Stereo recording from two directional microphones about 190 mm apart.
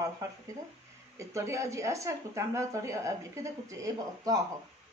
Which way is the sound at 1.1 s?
15° right (ahead or behind).